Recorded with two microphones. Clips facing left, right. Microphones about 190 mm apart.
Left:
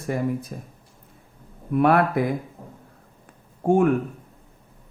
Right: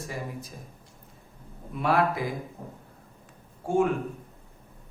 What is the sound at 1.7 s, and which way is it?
Speech, 55° left (ahead or behind).